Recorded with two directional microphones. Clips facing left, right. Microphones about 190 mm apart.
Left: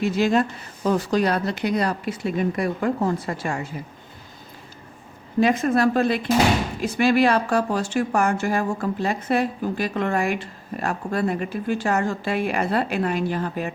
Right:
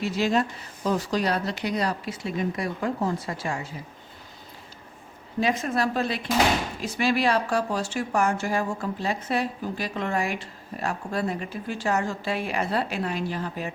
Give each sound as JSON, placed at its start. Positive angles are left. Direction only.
{"t": 0.0, "sound": "a woman's voice", "side_deg": 55}
{"t": 5.4, "sound": "a woman's voice", "side_deg": 55}